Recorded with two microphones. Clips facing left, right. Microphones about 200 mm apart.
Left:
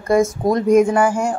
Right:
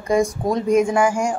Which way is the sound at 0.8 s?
10° right (ahead or behind).